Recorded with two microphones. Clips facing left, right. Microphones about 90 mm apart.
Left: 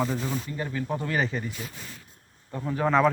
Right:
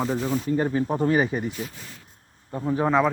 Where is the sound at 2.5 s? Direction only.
20° right (ahead or behind).